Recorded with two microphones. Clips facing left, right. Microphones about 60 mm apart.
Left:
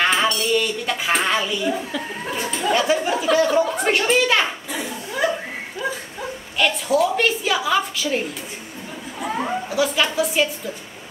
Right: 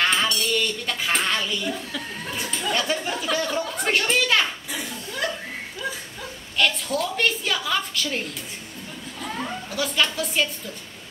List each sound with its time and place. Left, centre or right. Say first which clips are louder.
0.0 s speech: left 3 dB; centre
4.8 s laughter: left 7 dB; centre
5.3 s a sound: left 5 dB; centre
6.7 s speech: left 8 dB; centre
9.2 s speech: left 7 dB; left
9.7 s speech: left 2 dB; centre